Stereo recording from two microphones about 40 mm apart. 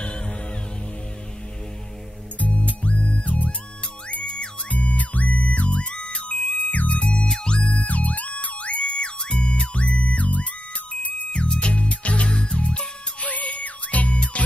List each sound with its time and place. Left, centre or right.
2.3 s music: left
4.6 s music: left
7.7 s music: left
8.8 s music: left
11.4 s music: left
13.2 s music: left